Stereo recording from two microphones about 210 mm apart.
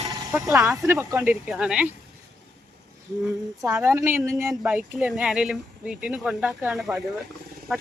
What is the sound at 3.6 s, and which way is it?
Speech, 5° right (ahead or behind).